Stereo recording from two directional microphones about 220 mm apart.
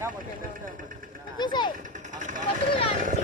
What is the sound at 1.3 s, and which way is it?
Speech, 20° left (ahead or behind).